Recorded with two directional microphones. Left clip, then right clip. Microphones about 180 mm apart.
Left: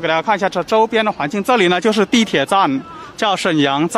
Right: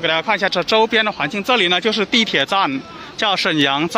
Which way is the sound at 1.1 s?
25° left (ahead or behind).